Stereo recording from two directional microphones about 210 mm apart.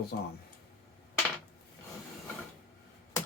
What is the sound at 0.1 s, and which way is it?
Speech, 55° left (ahead or behind).